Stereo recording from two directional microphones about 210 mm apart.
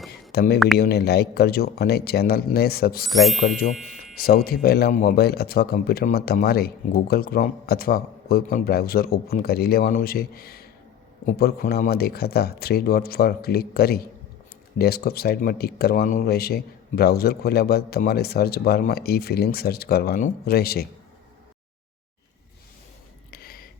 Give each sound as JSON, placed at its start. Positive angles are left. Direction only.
{"t": 0.3, "sound": "speech", "side_deg": 50}
{"t": 3.1, "sound": "speech", "side_deg": 0}
{"t": 3.6, "sound": "speech", "side_deg": 40}
{"t": 23.3, "sound": "a sound", "side_deg": 45}